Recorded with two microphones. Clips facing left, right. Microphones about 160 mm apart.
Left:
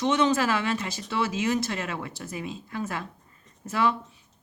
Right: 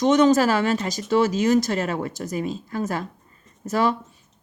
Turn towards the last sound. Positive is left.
turn(degrees=-40)  # may be behind; listen again after turning